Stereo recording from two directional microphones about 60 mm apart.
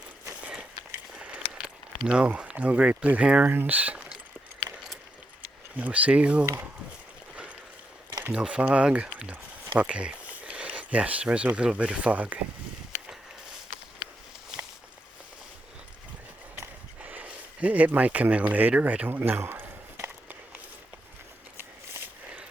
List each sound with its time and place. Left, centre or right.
1.1 s a sound: centre
3.4 s speech: right
5.4 s speech: right
8.3 s speech: centre
16.6 s a sound: right
18.7 s speech: right